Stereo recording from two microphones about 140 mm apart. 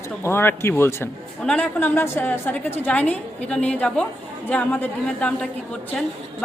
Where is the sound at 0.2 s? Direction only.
15° left (ahead or behind).